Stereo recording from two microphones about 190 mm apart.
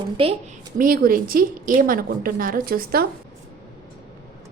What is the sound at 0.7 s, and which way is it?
A woman's voice, 50° right (ahead or behind).